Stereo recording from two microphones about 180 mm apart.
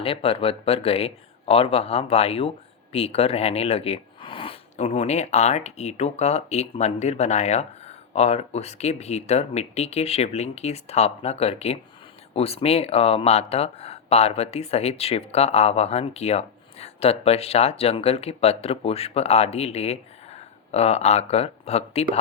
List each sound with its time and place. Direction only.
0.0 s speech: 30° left (ahead or behind)